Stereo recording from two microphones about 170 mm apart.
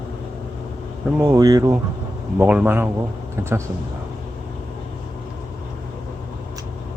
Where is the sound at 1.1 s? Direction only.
20° right (ahead or behind).